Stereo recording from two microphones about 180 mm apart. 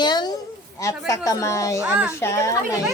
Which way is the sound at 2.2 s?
15° left (ahead or behind).